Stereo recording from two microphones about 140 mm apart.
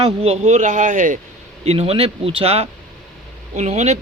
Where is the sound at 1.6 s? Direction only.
45° right (ahead or behind).